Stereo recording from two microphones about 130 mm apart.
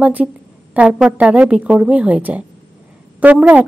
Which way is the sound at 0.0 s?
10° right (ahead or behind).